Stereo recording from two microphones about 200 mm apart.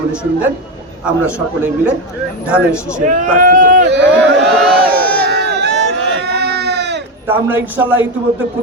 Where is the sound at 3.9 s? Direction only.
60° right (ahead or behind).